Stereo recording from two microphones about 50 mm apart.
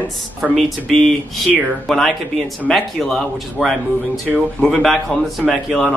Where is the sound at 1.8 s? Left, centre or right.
Centre.